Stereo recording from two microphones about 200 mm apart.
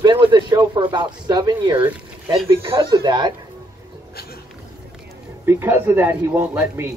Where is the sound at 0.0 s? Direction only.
20° right (ahead or behind).